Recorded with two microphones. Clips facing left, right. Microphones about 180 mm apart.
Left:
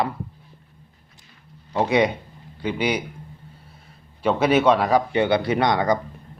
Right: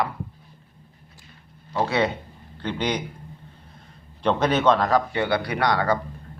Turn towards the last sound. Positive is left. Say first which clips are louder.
# left 3 dB
turn(degrees=20)  # may be behind; listen again after turning